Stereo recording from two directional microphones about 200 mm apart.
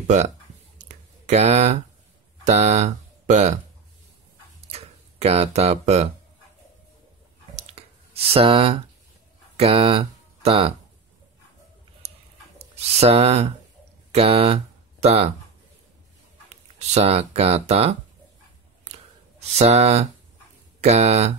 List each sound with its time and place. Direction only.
0.0 s speech: 35° right (ahead or behind)
0.7 s a sound: 35° right (ahead or behind)
2.4 s speech: 35° right (ahead or behind)
4.6 s a sound: 30° right (ahead or behind)
7.5 s a sound: 30° right (ahead or behind)
9.6 s speech: 30° right (ahead or behind)
12.5 s speech: 30° right (ahead or behind)
16.4 s speech: 30° right (ahead or behind)
19.5 s speech: 30° right (ahead or behind)